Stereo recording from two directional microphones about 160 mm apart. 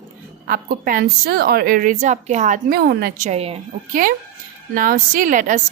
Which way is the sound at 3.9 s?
60° right (ahead or behind).